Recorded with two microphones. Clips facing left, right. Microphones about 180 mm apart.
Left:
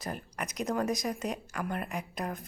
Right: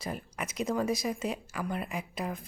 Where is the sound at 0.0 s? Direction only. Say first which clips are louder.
Right 1 dB; centre (ahead or behind).